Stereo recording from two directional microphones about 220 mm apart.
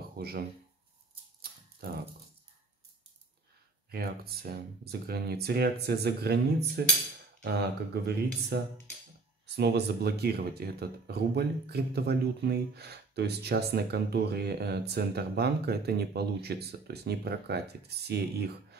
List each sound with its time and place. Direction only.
0.2 s speech: 45° right (ahead or behind)
3.9 s speech: 45° right (ahead or behind)
9.6 s speech: 45° right (ahead or behind)